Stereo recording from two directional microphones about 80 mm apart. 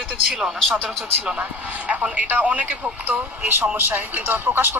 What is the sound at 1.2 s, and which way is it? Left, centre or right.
Speech, centre.